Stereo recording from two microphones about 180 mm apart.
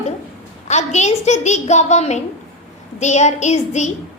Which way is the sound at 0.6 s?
40° left (ahead or behind).